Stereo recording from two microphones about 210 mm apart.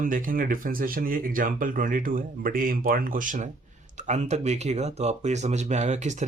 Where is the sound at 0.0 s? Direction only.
40° right (ahead or behind).